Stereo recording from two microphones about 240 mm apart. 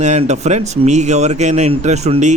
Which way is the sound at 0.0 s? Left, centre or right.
Right.